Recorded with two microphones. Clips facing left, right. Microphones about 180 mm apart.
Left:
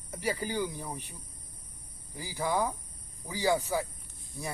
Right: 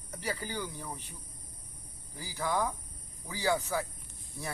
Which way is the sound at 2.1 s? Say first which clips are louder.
Left 2 dB; 15° left (ahead or behind).